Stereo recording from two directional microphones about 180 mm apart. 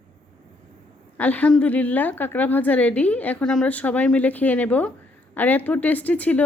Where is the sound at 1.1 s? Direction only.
10° left (ahead or behind).